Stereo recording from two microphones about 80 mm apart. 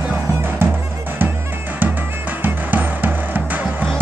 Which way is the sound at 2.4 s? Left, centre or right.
Right.